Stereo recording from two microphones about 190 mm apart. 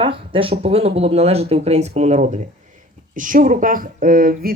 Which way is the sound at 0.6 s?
30° right (ahead or behind).